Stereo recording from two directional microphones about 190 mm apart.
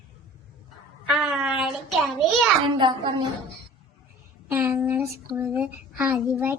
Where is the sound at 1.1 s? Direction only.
Centre (ahead or behind).